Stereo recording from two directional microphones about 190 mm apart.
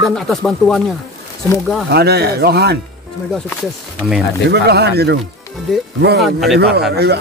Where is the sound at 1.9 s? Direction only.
60° right (ahead or behind).